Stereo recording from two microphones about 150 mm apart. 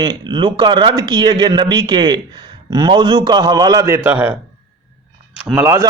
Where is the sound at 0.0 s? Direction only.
30° right (ahead or behind); by 4.4 s 10° right (ahead or behind).